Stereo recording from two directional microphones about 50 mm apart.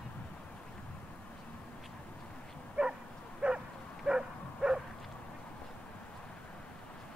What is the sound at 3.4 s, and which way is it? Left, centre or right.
Bow-wow, right.